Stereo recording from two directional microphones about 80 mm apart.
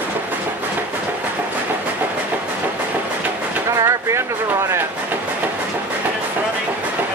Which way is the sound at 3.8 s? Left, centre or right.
Right.